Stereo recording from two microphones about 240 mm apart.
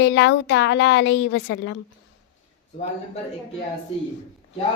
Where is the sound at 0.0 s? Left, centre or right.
Left.